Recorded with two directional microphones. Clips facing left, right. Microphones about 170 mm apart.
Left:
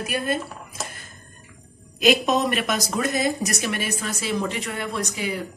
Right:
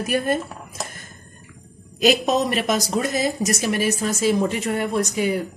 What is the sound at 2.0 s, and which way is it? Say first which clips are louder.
A woman's voice: right 1 dB; 35° right (ahead or behind).